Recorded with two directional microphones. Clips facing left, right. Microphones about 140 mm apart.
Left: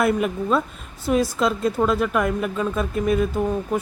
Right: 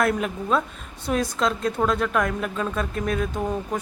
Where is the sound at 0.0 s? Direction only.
5° left (ahead or behind).